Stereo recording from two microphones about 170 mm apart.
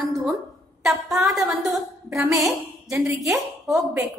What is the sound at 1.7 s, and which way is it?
Speech, 15° right (ahead or behind).